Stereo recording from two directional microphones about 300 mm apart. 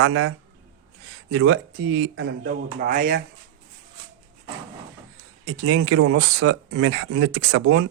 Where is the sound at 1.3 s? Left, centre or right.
Right.